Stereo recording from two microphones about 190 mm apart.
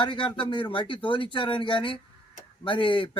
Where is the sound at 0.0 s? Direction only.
25° left (ahead or behind).